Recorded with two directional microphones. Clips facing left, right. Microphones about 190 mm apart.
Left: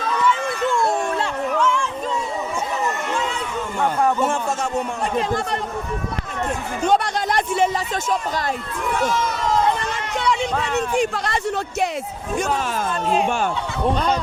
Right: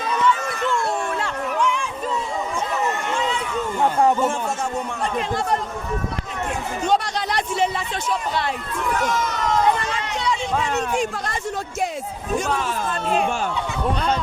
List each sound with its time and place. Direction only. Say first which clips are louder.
1.5 s a sound: left 2 dB; 15° right (ahead or behind)
6.8 s speech: left 3 dB; 55° left (ahead or behind)
10.8 s speech: left 2 dB; 65° left (ahead or behind)